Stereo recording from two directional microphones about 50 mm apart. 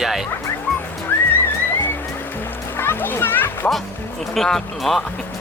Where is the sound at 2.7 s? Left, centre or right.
Left.